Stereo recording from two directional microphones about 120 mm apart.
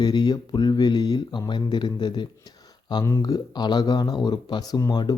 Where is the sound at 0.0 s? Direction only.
35° left (ahead or behind).